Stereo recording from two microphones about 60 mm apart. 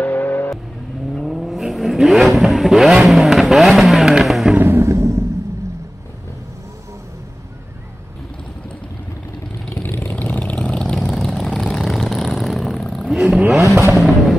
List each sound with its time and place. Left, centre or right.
0.0 s vehicle: left
1.2 s vehicle: centre
4.2 s music: centre
4.6 s a sound: right
9.8 s vehicle: left
10.2 s vehicle: left; by 13.2 s centre
13.9 s music: centre